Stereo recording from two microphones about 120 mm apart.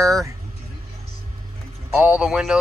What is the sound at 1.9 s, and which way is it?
Speech, 10° right (ahead or behind).